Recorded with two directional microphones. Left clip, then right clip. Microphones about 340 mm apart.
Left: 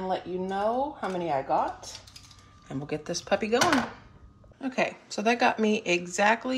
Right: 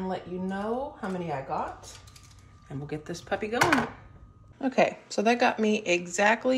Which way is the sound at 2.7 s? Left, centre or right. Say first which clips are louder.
Left 4 dB; centre.